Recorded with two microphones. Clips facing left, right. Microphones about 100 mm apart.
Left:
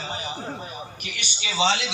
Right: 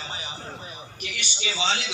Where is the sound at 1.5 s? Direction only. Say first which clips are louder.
Left 5 dB; 65° left (ahead or behind).